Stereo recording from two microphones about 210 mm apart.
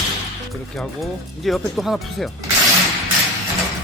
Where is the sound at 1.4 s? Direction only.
Centre (ahead or behind).